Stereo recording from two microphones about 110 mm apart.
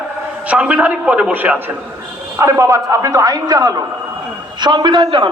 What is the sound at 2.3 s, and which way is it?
A man's voice, 25° right (ahead or behind).